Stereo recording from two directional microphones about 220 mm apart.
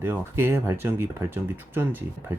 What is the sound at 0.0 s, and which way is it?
Speech, 10° right (ahead or behind).